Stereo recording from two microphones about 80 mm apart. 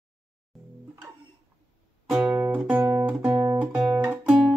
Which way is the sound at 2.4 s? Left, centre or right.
Right.